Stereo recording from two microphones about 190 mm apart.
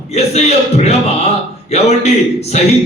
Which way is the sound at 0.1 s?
35° left (ahead or behind).